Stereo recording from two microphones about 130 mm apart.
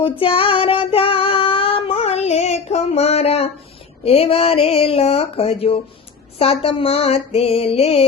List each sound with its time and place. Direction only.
0.0 s child singing: 45° left (ahead or behind)
4.0 s speech: 50° left (ahead or behind)